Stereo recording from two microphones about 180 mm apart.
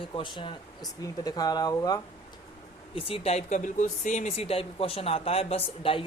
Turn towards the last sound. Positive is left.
turn(degrees=30)  # may be behind; listen again after turning